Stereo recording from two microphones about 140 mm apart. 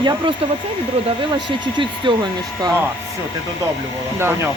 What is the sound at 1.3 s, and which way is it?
Speech, 35° right (ahead or behind).